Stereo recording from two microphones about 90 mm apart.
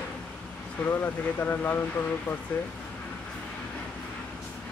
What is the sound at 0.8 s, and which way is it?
Speech, 25° left (ahead or behind).